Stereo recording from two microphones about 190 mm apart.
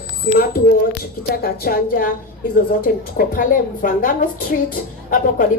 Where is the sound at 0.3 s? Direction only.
50° left (ahead or behind).